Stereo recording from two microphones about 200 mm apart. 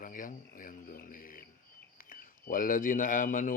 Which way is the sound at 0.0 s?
40° left (ahead or behind).